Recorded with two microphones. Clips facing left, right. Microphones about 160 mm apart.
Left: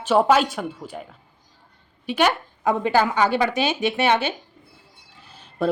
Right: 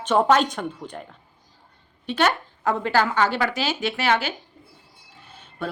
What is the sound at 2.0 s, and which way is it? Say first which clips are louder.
Speech: left 1 dB; 10° left (ahead or behind).